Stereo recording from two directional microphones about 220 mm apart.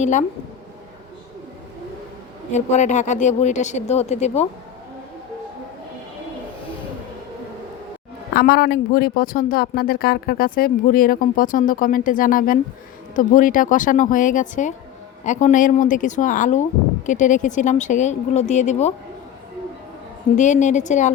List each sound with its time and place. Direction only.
0.0 s speech: 35° left (ahead or behind)
2.5 s speech: 30° left (ahead or behind)
8.3 s speech: 45° left (ahead or behind)
20.3 s speech: 35° left (ahead or behind)